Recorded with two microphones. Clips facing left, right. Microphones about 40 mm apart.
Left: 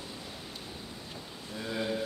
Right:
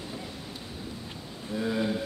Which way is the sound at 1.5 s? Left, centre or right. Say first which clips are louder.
Right 5 dB; centre.